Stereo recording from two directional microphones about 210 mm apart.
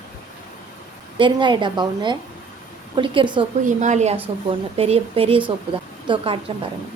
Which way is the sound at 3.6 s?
35° right (ahead or behind).